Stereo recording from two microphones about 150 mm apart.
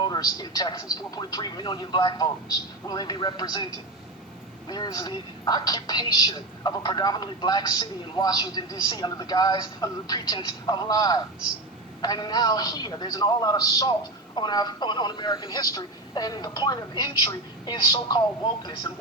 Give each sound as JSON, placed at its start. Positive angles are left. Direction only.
{"t": 0.1, "sound": "speech", "side_deg": 25}
{"t": 4.7, "sound": "speech", "side_deg": 25}